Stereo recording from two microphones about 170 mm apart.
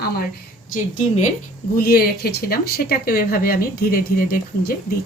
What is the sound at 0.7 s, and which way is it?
Speech, 45° left (ahead or behind).